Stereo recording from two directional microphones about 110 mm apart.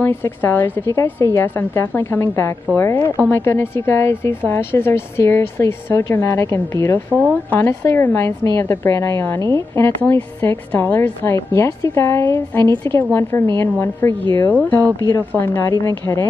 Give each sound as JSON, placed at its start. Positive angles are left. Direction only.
{"t": 0.0, "sound": "a woman's voice", "side_deg": 20}
{"t": 7.1, "sound": "speech", "side_deg": -15}
{"t": 7.5, "sound": "a woman's voice", "side_deg": 20}